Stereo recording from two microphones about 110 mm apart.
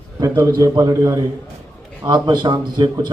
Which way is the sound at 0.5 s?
35° right (ahead or behind).